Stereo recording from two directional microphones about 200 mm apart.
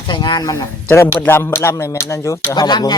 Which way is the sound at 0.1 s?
25° left (ahead or behind).